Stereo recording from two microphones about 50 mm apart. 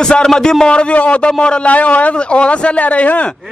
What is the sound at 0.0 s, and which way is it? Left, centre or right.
A man's voice, centre.